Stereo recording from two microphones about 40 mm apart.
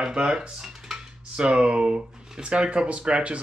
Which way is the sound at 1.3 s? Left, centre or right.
Right.